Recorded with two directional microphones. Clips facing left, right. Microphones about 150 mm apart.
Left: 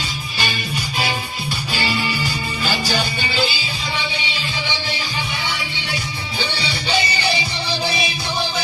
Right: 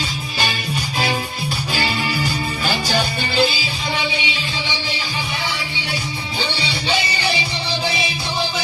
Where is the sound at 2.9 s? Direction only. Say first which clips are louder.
Right 2 dB; 40° right (ahead or behind).